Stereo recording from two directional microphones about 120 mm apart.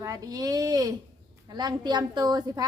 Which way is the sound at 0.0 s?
30° right (ahead or behind).